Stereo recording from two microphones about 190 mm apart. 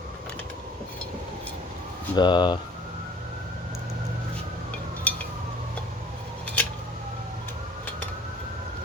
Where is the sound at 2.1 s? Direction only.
25° left (ahead or behind).